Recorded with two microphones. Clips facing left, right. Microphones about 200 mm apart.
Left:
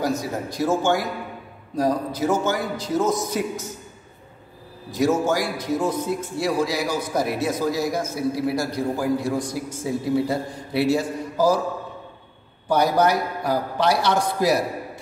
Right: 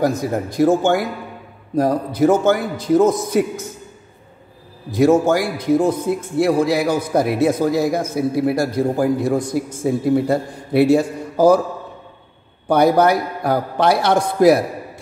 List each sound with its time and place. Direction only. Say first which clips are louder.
0.0 s a man's voice: right 6 dB; 55° right (ahead or behind)
4.9 s a man's voice: right 6 dB; 55° right (ahead or behind)
12.6 s a man's voice: right 5 dB; 55° right (ahead or behind)